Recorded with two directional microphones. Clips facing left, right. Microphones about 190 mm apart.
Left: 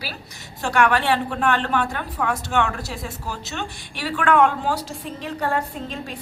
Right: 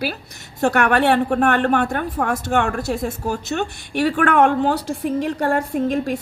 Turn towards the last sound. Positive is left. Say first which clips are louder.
# right 11 dB
turn(degrees=-55)  # may be behind; listen again after turning